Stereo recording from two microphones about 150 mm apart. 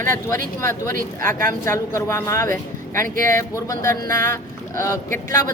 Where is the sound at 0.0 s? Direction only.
15° left (ahead or behind).